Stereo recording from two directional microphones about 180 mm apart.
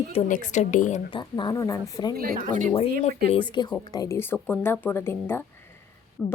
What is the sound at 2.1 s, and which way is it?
Speech, 55° right (ahead or behind).